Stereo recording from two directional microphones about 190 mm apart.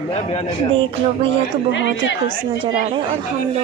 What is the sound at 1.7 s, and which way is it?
Speech, 70° left (ahead or behind).